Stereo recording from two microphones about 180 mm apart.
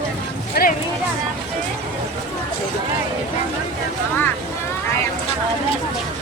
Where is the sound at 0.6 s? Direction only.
55° left (ahead or behind).